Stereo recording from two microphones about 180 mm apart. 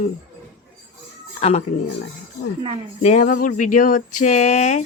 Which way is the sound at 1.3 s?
35° left (ahead or behind).